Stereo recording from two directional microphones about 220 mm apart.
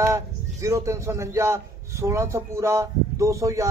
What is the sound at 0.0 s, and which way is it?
Speech, 10° right (ahead or behind).